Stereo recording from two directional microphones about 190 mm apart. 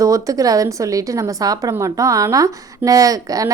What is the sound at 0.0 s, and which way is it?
A woman's voice, 15° right (ahead or behind).